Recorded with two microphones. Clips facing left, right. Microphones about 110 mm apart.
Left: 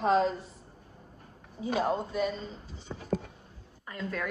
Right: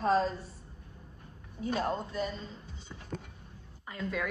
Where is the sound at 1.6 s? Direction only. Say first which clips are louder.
Left 3 dB; 15° left (ahead or behind).